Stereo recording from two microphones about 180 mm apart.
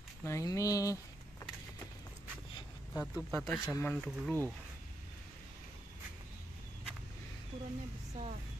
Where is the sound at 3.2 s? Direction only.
Centre (ahead or behind).